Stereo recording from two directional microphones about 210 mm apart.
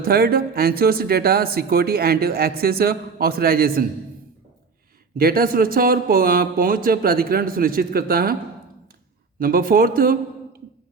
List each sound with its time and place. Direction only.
0.0 s speech: 45° right (ahead or behind)
5.1 s speech: 45° right (ahead or behind)
9.4 s speech: 45° right (ahead or behind)